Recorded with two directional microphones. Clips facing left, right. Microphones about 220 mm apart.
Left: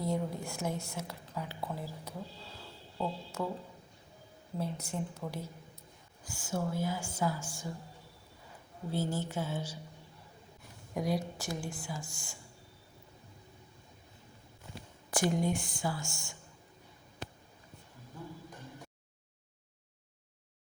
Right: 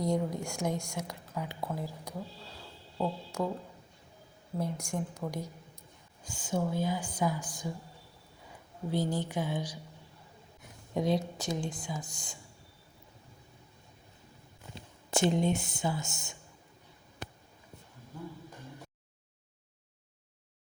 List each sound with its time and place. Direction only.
0.3 s a woman's voice: 15° right (ahead or behind)
4.5 s a woman's voice: 10° right (ahead or behind)
8.9 s a woman's voice: 15° right (ahead or behind)
10.9 s a woman's voice: 25° right (ahead or behind)
14.8 s speech: 25° right (ahead or behind)